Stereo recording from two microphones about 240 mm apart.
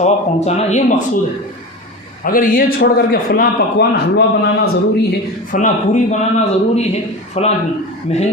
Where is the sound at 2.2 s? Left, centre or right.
Left.